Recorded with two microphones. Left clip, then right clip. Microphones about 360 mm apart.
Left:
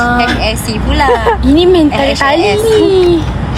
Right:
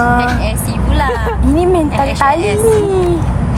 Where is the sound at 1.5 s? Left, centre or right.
Right.